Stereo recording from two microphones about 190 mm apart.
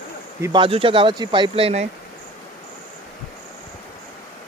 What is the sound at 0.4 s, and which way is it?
Speech, 25° right (ahead or behind).